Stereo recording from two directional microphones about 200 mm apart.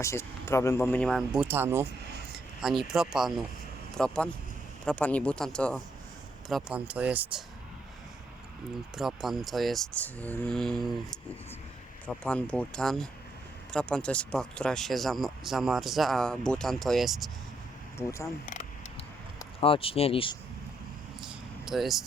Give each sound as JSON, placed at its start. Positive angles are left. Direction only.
{"t": 0.0, "sound": "speech", "side_deg": 15}
{"t": 6.5, "sound": "speech", "side_deg": -5}
{"t": 9.0, "sound": "speech", "side_deg": 0}
{"t": 12.0, "sound": "speech", "side_deg": 5}
{"t": 17.9, "sound": "speech", "side_deg": 15}
{"t": 19.5, "sound": "speech", "side_deg": 30}
{"t": 21.2, "sound": "vehicle", "side_deg": 0}